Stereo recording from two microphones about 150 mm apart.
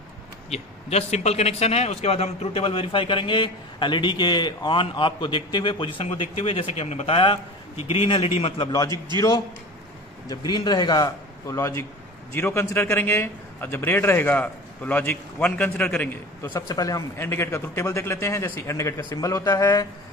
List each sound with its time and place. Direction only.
0.5 s a man's voice: 45° left (ahead or behind)
10.2 s a man's voice: 25° left (ahead or behind); by 16.5 s 10° left (ahead or behind)
16.5 s speech: 25° left (ahead or behind)